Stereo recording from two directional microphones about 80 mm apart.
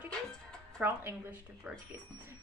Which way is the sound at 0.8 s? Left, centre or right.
Centre.